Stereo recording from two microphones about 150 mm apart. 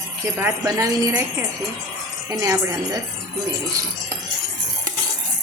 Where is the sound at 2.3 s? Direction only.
20° right (ahead or behind).